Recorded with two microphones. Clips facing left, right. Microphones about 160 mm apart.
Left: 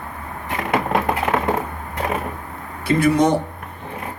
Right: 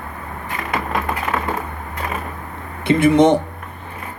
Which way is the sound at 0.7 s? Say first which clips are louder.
Left 3 dB; 60° left (ahead or behind).